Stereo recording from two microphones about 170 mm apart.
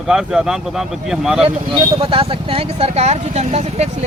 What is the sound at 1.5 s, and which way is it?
Speech, 30° right (ahead or behind).